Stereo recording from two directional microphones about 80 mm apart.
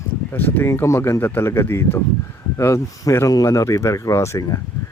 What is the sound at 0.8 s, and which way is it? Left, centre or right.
Speech, left.